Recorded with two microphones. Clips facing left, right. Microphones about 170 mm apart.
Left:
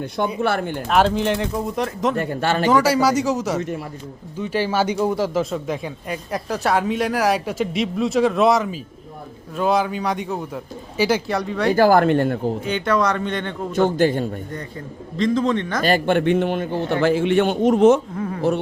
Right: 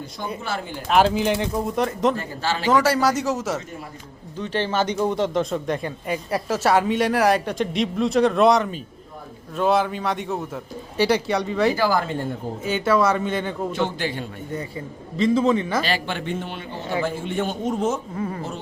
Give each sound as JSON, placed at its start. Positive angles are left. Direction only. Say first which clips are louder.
{"t": 0.4, "sound": "speech", "louder": "left 8 dB", "side_deg": 60}
{"t": 0.9, "sound": "speech", "louder": "even", "side_deg": 0}
{"t": 2.1, "sound": "speech", "louder": "left 6 dB", "side_deg": 60}
{"t": 2.6, "sound": "speech", "louder": "left 1 dB", "side_deg": 0}
{"t": 4.4, "sound": "speech", "louder": "left 2 dB", "side_deg": 10}
{"t": 11.7, "sound": "speech", "louder": "left 7 dB", "side_deg": 55}
{"t": 12.6, "sound": "speech", "louder": "right 3 dB", "side_deg": -5}
{"t": 13.7, "sound": "a man's voice", "louder": "left 13 dB", "side_deg": 45}
{"t": 14.5, "sound": "a man's voice", "louder": "right 1 dB", "side_deg": -5}
{"t": 15.8, "sound": "a man's voice", "louder": "left 8 dB", "side_deg": 50}
{"t": 18.1, "sound": "speech", "louder": "left 1 dB", "side_deg": 0}